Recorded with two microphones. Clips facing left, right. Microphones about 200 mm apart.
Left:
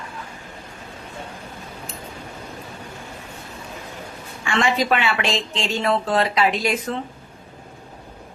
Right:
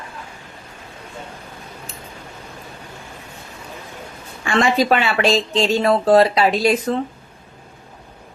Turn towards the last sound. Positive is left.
turn(degrees=-35)  # may be behind; listen again after turning